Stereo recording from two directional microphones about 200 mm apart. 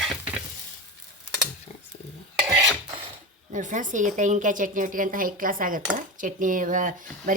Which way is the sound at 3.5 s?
40° right (ahead or behind).